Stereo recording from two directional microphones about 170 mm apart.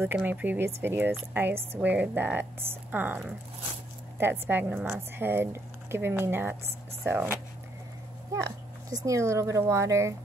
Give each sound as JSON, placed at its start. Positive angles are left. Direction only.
{"t": 0.0, "sound": "a woman's voice", "side_deg": -10}
{"t": 8.9, "sound": "a woman's voice", "side_deg": -20}